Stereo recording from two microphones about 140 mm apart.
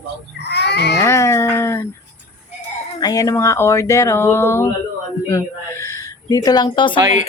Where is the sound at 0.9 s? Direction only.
20° left (ahead or behind).